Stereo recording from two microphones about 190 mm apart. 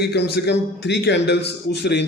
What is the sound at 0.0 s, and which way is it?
A man's voice, 60° left (ahead or behind).